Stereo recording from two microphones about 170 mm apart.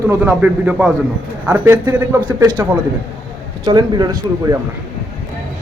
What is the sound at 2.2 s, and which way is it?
Speech, 25° right (ahead or behind).